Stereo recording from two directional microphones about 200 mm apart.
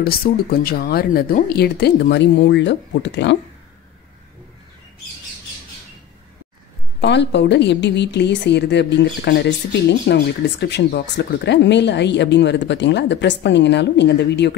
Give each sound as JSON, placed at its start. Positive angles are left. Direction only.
{"t": 0.0, "sound": "speech", "side_deg": 50}
{"t": 7.0, "sound": "a woman's voice", "side_deg": 60}